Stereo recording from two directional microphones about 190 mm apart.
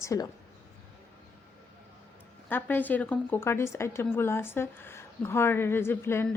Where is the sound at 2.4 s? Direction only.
10° left (ahead or behind).